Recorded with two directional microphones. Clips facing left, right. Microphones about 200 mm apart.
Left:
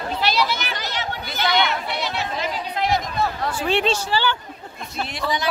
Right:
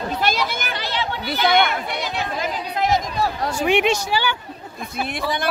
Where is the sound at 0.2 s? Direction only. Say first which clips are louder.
Left 3 dB; 50° right (ahead or behind).